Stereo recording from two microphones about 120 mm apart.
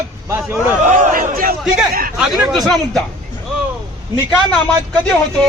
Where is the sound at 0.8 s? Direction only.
90° right.